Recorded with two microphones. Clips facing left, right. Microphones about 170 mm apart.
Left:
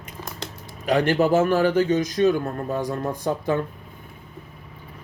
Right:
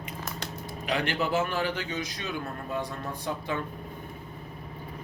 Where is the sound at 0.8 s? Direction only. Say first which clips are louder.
Left 10 dB; 45° left (ahead or behind).